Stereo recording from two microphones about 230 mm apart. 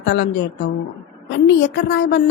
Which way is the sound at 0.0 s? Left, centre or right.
Left.